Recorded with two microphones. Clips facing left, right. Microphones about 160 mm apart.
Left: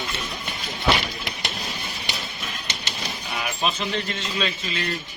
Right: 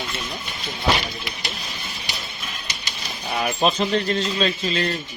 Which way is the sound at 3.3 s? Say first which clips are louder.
Right 7 dB; 40° right (ahead or behind).